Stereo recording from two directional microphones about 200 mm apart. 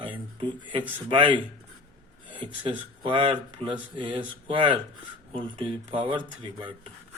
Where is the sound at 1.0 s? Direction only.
25° right (ahead or behind).